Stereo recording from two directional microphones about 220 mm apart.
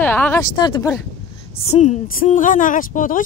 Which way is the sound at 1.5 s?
30° left (ahead or behind).